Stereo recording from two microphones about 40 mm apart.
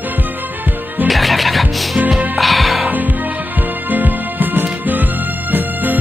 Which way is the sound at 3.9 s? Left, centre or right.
Right.